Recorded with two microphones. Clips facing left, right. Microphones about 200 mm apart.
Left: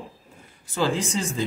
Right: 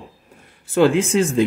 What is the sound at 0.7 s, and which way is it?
Speech, 60° right (ahead or behind).